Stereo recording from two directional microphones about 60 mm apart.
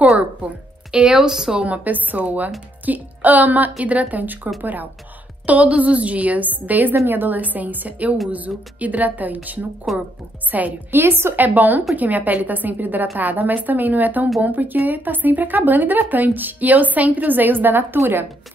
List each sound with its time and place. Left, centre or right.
1.1 s speech: centre
1.6 s a woman's voice: right
9.9 s a woman's voice: centre
10.5 s a woman's voice: right
10.9 s speech: right
11.4 s a woman's voice: right